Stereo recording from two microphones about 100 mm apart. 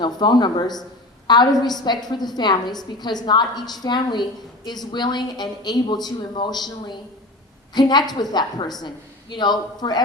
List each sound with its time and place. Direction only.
0.0 s a woman's voice: 50° left (ahead or behind)